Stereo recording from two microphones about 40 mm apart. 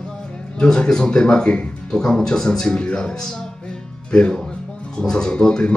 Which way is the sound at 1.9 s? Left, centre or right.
Centre.